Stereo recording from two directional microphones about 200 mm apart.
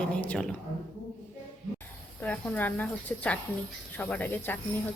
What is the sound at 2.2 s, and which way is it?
Speech, 10° left (ahead or behind).